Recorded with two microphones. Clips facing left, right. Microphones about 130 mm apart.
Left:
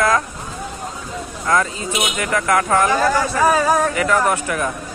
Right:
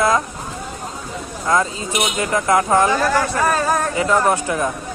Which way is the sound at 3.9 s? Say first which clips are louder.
Right 1 dB; 25° right (ahead or behind).